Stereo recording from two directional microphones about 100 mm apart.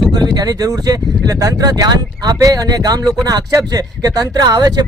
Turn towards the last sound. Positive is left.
turn(degrees=-40)  # may be behind; listen again after turning